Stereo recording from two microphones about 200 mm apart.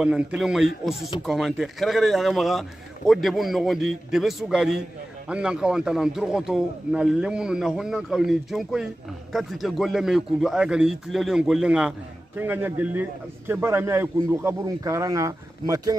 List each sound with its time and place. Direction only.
0.0 s a man's voice: 5° right (ahead or behind)